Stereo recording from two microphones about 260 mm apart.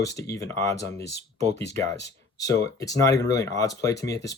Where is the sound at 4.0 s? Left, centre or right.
Left.